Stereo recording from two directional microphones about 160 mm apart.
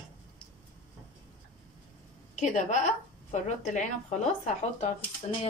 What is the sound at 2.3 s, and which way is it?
A woman's voice, 50° left (ahead or behind).